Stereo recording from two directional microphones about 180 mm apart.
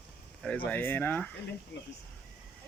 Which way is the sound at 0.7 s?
10° left (ahead or behind).